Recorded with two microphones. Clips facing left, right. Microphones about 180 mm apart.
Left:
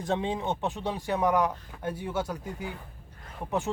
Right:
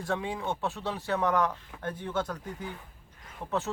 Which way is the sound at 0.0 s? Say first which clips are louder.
Left 3 dB; 20° left (ahead or behind).